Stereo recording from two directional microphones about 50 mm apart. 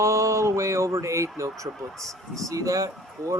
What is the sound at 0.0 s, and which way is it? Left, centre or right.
Speech, right.